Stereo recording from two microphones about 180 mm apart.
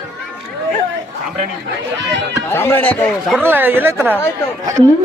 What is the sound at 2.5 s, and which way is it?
Speech, 10° left (ahead or behind).